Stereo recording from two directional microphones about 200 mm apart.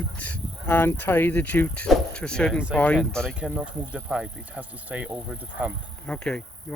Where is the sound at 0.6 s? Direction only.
10° left (ahead or behind); by 5.7 s 10° right (ahead or behind).